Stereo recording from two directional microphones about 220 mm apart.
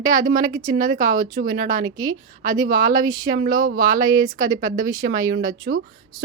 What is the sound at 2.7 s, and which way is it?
Speech, 40° right (ahead or behind).